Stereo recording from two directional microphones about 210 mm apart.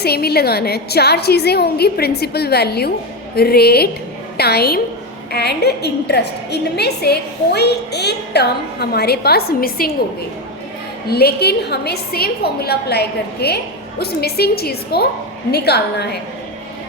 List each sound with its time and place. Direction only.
0.0 s a woman's voice: 50° left (ahead or behind)
11.1 s a woman's voice: 50° left (ahead or behind)